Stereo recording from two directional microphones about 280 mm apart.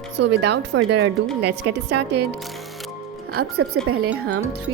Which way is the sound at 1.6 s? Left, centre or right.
Right.